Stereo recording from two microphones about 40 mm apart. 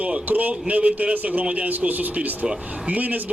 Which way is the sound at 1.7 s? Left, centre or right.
Right.